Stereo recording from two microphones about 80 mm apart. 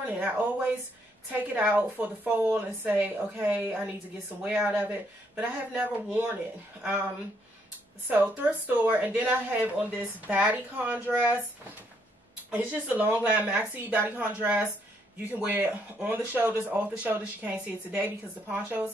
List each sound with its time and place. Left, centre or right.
1.3 s speech: right
8.1 s speech: right
12.4 s speech: centre